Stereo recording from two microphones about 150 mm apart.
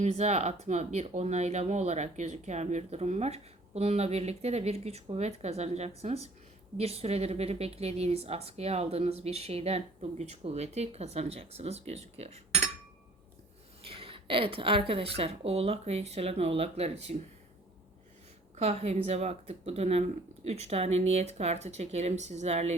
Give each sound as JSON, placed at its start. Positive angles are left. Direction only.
{"t": 0.0, "sound": "speech", "side_deg": -45}
{"t": 13.8, "sound": "a woman's voice", "side_deg": -40}
{"t": 18.5, "sound": "speech", "side_deg": -45}